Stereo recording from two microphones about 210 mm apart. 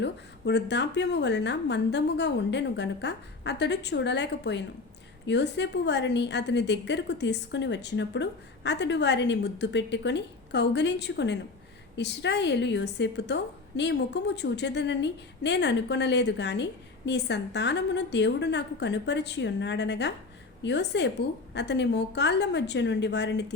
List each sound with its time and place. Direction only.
0.0 s a woman's voice: 55° left (ahead or behind)